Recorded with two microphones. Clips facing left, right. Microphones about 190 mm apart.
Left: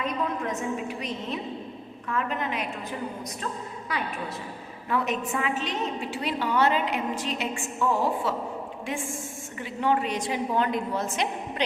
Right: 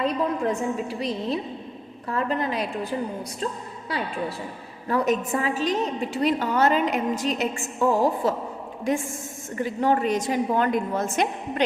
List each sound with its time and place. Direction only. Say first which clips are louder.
0.0 s a woman's voice: right 5 dB; 30° right (ahead or behind)
4.9 s a woman's voice: right 5 dB; 40° right (ahead or behind)